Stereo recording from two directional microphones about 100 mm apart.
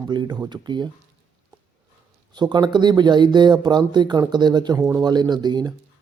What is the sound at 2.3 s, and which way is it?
Speech, 45° right (ahead or behind).